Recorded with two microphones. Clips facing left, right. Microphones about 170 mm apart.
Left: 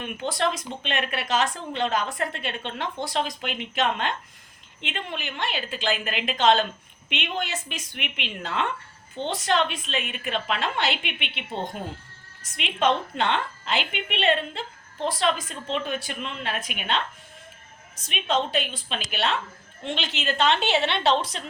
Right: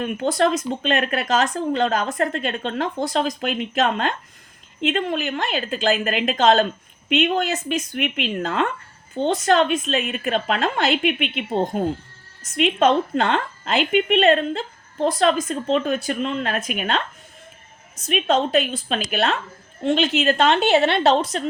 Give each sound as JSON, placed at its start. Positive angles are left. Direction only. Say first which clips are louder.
{"t": 0.0, "sound": "a woman's voice", "louder": "right 7 dB", "side_deg": -45}
{"t": 18.1, "sound": "a woman's voice", "louder": "right 7 dB", "side_deg": -45}